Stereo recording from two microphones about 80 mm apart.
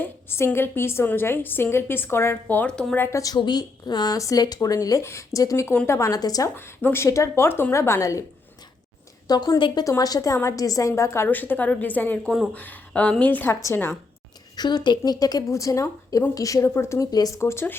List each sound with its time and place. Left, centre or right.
0.0 s a woman's voice: left
2.6 s a woman's voice: centre
3.0 s a woman's voice: left
3.3 s a woman's voice: left
4.2 s a woman's voice: left
6.6 s a woman's voice: left
9.2 s a woman's voice: left
10.0 s a woman's voice: left
13.5 s a woman's voice: left
14.5 s speech: left
16.7 s a woman's voice: left
17.0 s speech: left
17.3 s a woman's voice: left